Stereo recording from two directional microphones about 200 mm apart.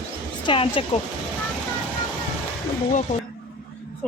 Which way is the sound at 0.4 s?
25° left (ahead or behind).